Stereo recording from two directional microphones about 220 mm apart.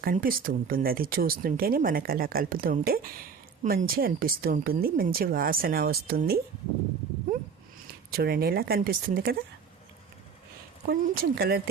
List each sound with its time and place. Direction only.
0.0 s speech: 40° right (ahead or behind)
8.1 s speech: 45° right (ahead or behind)
10.8 s speech: 45° right (ahead or behind)